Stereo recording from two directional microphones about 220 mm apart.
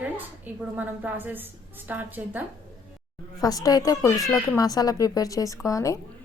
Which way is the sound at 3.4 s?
15° left (ahead or behind).